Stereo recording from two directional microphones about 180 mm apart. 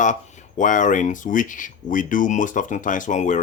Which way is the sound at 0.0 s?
40° left (ahead or behind).